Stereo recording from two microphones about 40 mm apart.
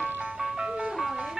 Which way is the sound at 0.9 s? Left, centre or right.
Centre.